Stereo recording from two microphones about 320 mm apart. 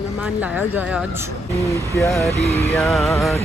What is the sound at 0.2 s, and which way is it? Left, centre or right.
Speech, centre.